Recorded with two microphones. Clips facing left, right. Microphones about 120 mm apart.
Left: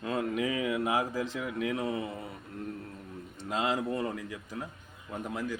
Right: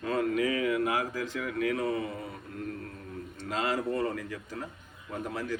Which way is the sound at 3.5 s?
20° left (ahead or behind).